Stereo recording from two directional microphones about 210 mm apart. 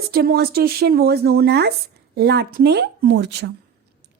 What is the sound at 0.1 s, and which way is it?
A woman's voice, 45° right (ahead or behind).